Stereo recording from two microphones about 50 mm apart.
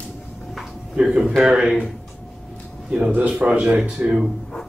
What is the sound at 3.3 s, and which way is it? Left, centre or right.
Speech, right.